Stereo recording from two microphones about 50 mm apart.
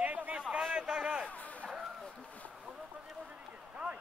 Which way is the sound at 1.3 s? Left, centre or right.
Left.